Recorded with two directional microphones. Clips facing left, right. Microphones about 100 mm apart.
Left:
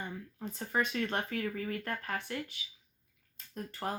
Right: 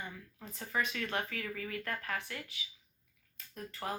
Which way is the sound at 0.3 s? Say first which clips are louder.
Left 3 dB; 30° left (ahead or behind).